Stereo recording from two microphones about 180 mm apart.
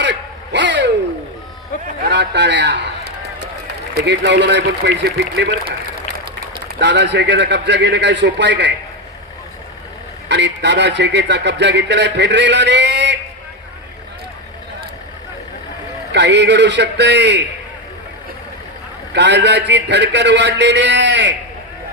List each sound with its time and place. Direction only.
0.0 s a sound: 75° right (ahead or behind)
2.0 s a sound: 70° right (ahead or behind)
3.9 s a man's voice: 70° right (ahead or behind)
6.7 s a man's voice: 70° right (ahead or behind)
10.2 s a man's voice: 75° right (ahead or behind)
16.1 s a man's voice: 75° right (ahead or behind)
19.1 s a man's voice: 70° right (ahead or behind)